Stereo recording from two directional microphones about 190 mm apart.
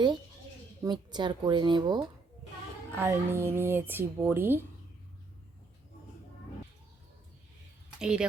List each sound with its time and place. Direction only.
0.9 s speech: 20° right (ahead or behind)
2.9 s speech: 10° right (ahead or behind)
7.9 s speech: 5° right (ahead or behind)